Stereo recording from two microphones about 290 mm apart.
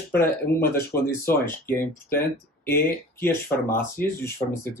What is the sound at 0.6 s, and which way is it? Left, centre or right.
Speech, left.